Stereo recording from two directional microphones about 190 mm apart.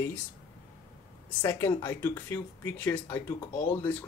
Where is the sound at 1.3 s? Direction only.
10° left (ahead or behind).